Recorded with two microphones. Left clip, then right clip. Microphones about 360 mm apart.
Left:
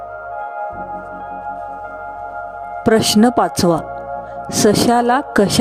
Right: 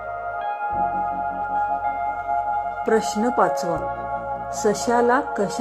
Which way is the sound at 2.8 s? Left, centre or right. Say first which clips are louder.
Left 9 dB; left.